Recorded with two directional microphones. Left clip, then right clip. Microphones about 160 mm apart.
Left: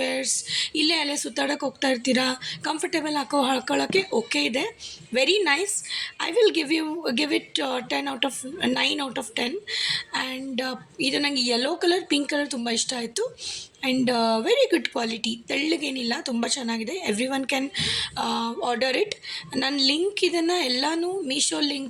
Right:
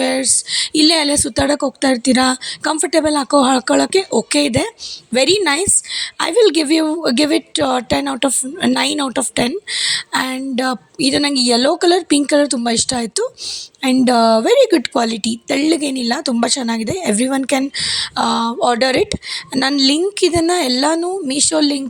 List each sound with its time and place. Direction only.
0.0 s a woman's voice: 50° right (ahead or behind)